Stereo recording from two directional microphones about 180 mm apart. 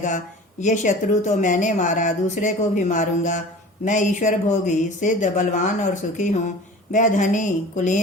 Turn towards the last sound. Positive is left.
turn(degrees=45)  # may be behind; listen again after turning